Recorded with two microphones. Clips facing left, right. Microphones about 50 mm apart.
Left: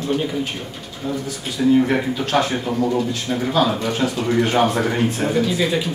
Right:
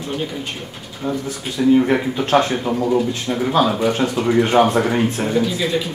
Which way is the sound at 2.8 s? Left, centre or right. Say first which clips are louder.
Right 2 dB; centre.